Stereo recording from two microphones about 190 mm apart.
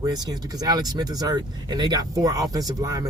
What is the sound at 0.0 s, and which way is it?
Speech, 20° right (ahead or behind).